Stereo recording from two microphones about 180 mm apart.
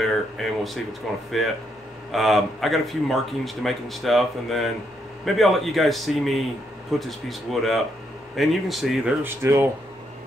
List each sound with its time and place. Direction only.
0.0 s speech: centre (ahead or behind)
9.2 s speech: 15° right (ahead or behind)